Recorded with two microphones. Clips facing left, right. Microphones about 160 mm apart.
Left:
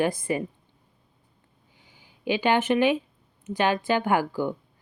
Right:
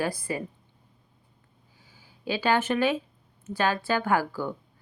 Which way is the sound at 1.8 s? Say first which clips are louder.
Left 4 dB; 15° left (ahead or behind).